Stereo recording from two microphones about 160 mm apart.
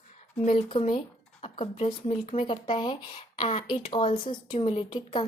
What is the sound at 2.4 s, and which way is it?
Speech, 30° left (ahead or behind).